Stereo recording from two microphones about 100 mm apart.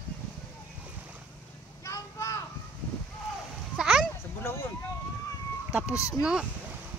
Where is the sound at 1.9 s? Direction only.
30° left (ahead or behind).